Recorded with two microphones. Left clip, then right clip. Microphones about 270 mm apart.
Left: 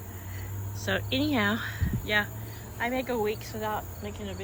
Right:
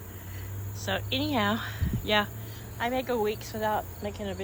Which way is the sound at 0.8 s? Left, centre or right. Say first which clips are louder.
Left 1 dB; centre.